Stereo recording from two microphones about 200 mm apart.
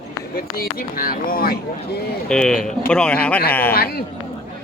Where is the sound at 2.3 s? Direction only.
5° left (ahead or behind).